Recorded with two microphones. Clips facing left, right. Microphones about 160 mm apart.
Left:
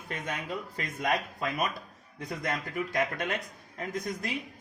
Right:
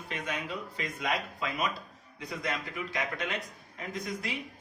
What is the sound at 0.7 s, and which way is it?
Speech, 50° left (ahead or behind).